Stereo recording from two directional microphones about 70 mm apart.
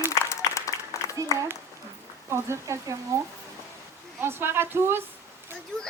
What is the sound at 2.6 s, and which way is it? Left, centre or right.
Speech, right.